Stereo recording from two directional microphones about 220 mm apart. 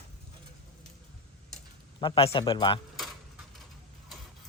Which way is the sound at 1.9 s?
25° left (ahead or behind).